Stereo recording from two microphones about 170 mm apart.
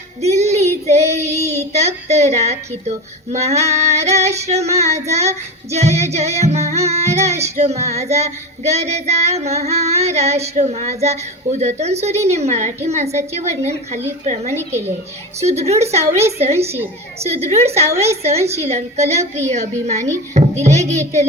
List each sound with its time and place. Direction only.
0.2 s child singing: 40° right (ahead or behind)
2.0 s female singing: 40° right (ahead or behind)
14.5 s a woman's voice: 15° right (ahead or behind)
15.4 s female singing: 40° right (ahead or behind)